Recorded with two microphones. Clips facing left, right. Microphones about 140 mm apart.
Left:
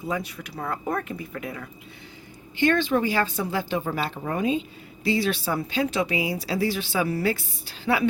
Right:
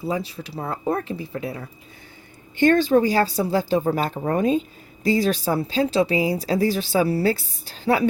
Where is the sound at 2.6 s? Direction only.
40° right (ahead or behind).